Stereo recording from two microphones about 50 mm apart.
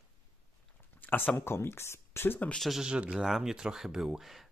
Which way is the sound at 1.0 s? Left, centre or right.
Left.